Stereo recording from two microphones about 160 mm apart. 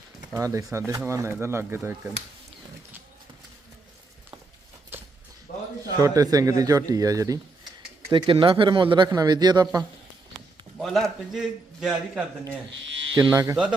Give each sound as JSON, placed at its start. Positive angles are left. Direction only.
{"t": 0.3, "sound": "speech", "side_deg": -20}
{"t": 4.9, "sound": "a sound", "side_deg": -15}
{"t": 6.0, "sound": "speech", "side_deg": -20}
{"t": 8.1, "sound": "speech", "side_deg": -30}
{"t": 10.8, "sound": "a man's voice", "side_deg": 0}
{"t": 13.3, "sound": "speech", "side_deg": -20}